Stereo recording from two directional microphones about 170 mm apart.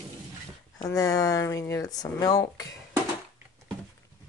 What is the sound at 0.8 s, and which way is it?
Speech, 20° left (ahead or behind).